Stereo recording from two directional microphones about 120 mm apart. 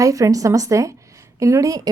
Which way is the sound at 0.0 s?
30° right (ahead or behind).